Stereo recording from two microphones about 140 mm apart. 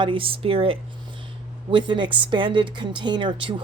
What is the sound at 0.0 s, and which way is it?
Speech, 40° right (ahead or behind).